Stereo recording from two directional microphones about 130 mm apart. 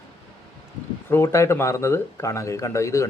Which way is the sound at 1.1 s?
20° left (ahead or behind).